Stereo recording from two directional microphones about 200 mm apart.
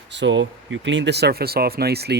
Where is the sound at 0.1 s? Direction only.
65° right (ahead or behind).